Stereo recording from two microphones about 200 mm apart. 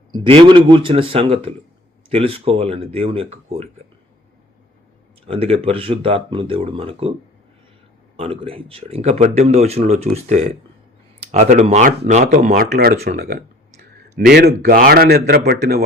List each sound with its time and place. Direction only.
0.1 s speech: 25° right (ahead or behind)
5.2 s speech: 30° right (ahead or behind)
8.1 s speech: 25° right (ahead or behind)
12.7 s speech: 50° right (ahead or behind)